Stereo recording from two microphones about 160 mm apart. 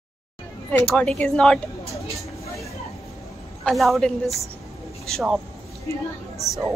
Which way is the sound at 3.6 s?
Centre (ahead or behind).